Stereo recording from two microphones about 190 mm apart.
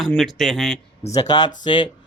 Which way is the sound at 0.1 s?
Centre (ahead or behind).